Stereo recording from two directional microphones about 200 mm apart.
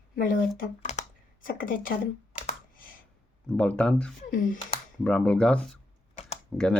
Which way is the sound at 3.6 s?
5° left (ahead or behind).